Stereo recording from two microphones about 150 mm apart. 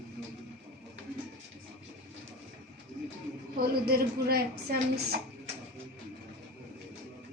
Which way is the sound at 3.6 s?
90° right.